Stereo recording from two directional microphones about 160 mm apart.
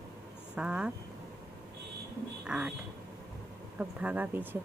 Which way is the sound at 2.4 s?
5° right (ahead or behind).